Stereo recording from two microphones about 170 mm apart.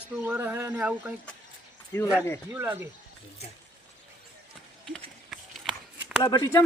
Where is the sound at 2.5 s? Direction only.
10° right (ahead or behind).